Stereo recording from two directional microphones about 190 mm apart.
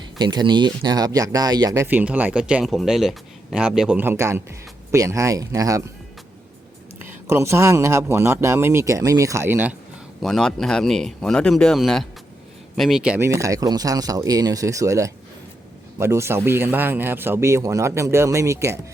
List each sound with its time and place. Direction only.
0.2 s speech: 25° right (ahead or behind)
7.0 s speech: 15° right (ahead or behind)
10.2 s speech: centre (ahead or behind); by 18.8 s 15° right (ahead or behind)